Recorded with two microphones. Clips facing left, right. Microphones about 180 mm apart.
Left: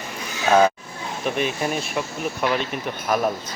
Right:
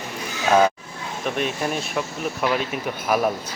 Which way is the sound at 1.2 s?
Centre (ahead or behind).